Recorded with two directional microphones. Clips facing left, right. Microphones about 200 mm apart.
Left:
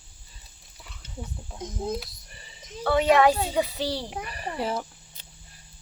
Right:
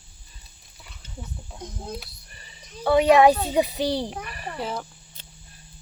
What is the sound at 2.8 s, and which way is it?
A child's voice, 15° right (ahead or behind).